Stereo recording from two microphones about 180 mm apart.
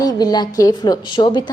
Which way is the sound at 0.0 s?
20° left (ahead or behind).